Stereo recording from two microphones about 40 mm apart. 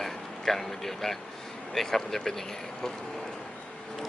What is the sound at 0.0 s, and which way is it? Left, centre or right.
Speech, centre.